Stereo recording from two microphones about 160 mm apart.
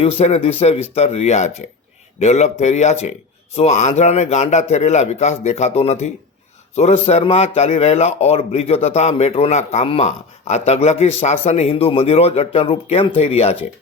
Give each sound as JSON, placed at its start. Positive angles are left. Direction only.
{"t": 0.0, "sound": "a man's voice", "side_deg": 40}